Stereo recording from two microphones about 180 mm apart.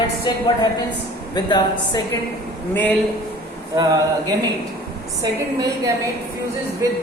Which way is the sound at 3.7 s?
20° right (ahead or behind).